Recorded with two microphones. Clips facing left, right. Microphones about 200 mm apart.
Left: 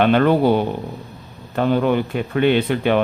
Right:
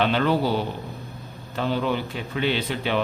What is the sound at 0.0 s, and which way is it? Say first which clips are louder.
Speech: left 7 dB; 55° left (ahead or behind).